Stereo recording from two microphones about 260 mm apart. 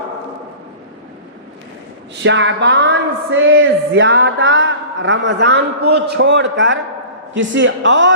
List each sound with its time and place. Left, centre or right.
2.2 s speech: right